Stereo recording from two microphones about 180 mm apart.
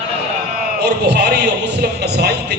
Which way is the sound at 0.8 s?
65° right (ahead or behind).